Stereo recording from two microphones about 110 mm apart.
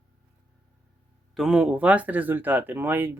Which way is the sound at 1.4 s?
5° right (ahead or behind).